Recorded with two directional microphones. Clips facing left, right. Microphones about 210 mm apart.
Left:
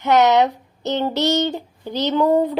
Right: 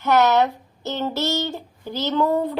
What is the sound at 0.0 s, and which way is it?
Speech, 20° left (ahead or behind).